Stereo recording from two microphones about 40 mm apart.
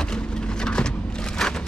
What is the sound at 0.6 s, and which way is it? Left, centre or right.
Vehicle, left.